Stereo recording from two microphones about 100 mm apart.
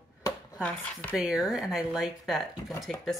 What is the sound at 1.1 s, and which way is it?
Speech, 5° right (ahead or behind).